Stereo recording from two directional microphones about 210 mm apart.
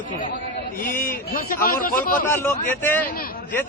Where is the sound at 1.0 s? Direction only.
45° left (ahead or behind).